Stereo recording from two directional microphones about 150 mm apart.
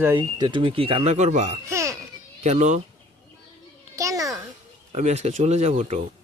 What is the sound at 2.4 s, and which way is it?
Speech, 50° right (ahead or behind).